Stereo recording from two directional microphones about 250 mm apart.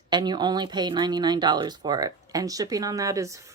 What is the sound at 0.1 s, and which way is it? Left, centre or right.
Speech, centre.